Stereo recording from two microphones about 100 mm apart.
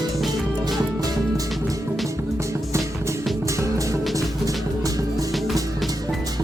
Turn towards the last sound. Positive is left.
turn(degrees=-35)  # may be behind; listen again after turning